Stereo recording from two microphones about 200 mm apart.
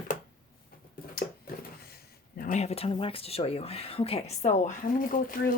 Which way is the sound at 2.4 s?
35° left (ahead or behind).